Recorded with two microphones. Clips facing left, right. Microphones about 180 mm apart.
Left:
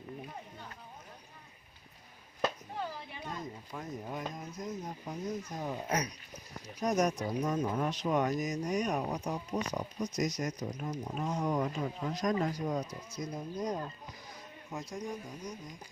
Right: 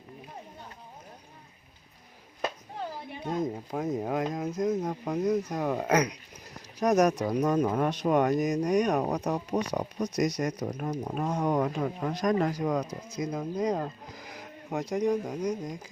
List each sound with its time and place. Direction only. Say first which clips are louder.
3.7 s speech: right 11 dB; 90° right